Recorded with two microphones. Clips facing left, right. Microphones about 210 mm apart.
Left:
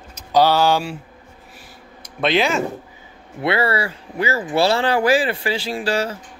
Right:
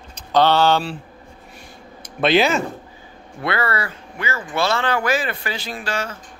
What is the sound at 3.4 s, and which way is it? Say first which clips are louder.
Speech: left 3 dB; 30° left (ahead or behind).